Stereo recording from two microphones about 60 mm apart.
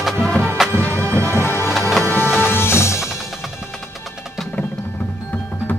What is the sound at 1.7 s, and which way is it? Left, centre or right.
Music, centre.